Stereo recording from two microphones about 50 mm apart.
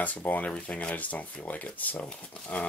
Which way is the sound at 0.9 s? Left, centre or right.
Left.